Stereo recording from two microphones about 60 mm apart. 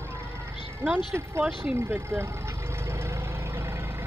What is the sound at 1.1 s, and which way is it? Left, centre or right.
Speech, right.